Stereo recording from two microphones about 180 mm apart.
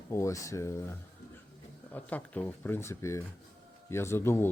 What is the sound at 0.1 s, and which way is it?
Speech, 15° left (ahead or behind).